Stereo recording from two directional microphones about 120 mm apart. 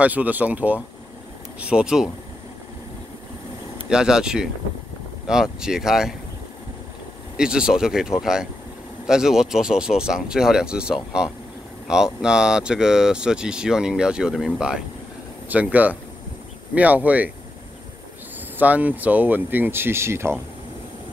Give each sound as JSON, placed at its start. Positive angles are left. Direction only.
{"t": 0.0, "sound": "speech", "side_deg": -15}
{"t": 3.9, "sound": "speech", "side_deg": -5}
{"t": 7.3, "sound": "speech", "side_deg": -5}
{"t": 18.6, "sound": "speech", "side_deg": -15}